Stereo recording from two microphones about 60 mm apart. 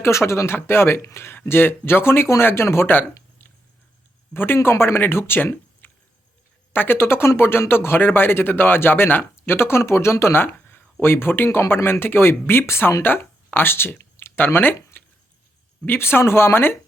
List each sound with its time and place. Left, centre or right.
0.0 s speech: left
15.9 s speech: left